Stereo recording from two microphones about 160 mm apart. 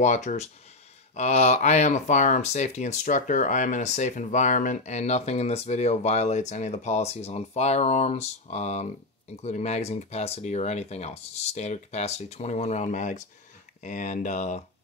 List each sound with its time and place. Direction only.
0.0 s speech: 50° left (ahead or behind)